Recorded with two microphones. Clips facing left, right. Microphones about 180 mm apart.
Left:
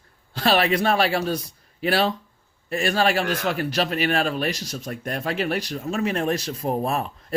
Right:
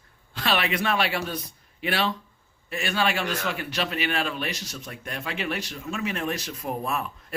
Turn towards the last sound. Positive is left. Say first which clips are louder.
# left 5 dB
turn(degrees=35)  # may be behind; listen again after turning